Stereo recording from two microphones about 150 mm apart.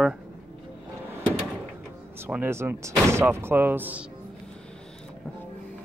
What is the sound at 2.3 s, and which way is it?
Speech, 15° right (ahead or behind).